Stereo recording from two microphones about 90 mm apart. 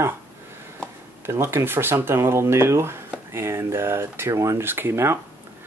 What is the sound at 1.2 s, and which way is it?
Speech, 30° right (ahead or behind).